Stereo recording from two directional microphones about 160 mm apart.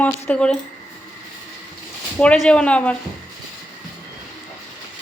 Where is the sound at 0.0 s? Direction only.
5° left (ahead or behind).